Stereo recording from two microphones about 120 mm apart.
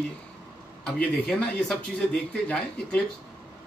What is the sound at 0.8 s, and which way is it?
A man's voice, 10° left (ahead or behind).